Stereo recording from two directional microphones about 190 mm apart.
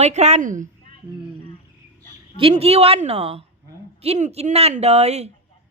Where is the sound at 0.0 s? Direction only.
35° right (ahead or behind).